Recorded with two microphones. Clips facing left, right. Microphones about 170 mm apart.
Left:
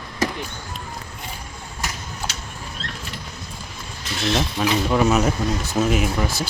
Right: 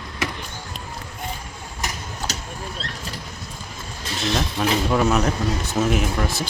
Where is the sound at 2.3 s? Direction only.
40° right (ahead or behind).